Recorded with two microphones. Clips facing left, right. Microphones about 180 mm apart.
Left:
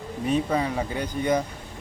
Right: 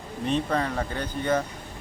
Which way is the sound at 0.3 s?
10° left (ahead or behind).